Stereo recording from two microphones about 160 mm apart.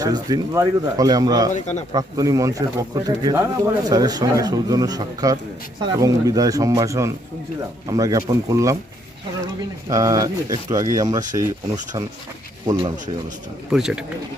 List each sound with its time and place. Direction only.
0.0 s speech: 20° right (ahead or behind)
1.5 s speech: 45° left (ahead or behind)
1.9 s speech: 25° right (ahead or behind)
9.9 s speech: 20° right (ahead or behind)
12.6 s speech: 25° right (ahead or behind)
13.7 s speech: 5° right (ahead or behind)